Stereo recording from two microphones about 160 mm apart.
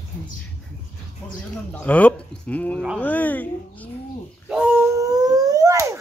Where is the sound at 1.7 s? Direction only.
10° left (ahead or behind).